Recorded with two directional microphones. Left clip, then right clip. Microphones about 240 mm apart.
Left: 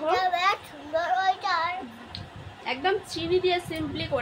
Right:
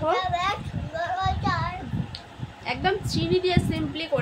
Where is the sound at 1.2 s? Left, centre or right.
Left.